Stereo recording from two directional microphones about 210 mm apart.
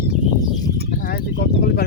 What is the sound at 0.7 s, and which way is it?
Speech, 45° left (ahead or behind).